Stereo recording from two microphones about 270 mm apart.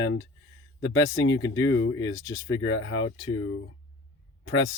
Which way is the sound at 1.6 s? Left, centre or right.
Left.